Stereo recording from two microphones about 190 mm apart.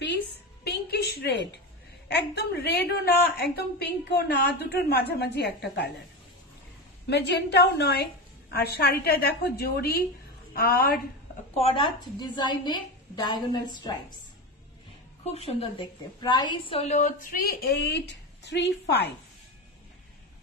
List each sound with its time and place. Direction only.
0.7 s a sound: 60° left (ahead or behind)
2.0 s a woman's voice: 60° left (ahead or behind)
7.1 s a woman's voice: 60° left (ahead or behind)
11.5 s a woman's voice: 30° left (ahead or behind)
15.3 s a woman's voice: 30° left (ahead or behind); by 19.1 s 60° left (ahead or behind)